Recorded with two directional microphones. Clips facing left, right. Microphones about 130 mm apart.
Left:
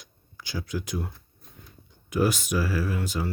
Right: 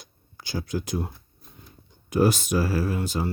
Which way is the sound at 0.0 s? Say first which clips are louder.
Right 1 dB; 35° right (ahead or behind).